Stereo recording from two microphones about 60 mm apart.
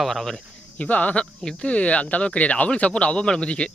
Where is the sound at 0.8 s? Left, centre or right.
Left.